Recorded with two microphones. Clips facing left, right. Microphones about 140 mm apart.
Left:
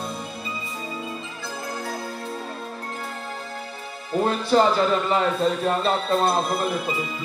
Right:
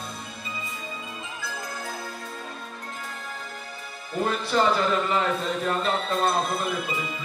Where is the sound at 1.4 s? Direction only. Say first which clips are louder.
Left 4 dB; 30° left (ahead or behind).